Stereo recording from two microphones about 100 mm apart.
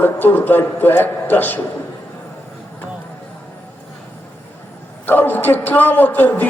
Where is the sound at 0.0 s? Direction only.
20° left (ahead or behind).